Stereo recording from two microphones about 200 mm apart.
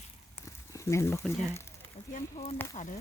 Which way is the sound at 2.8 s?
35° left (ahead or behind).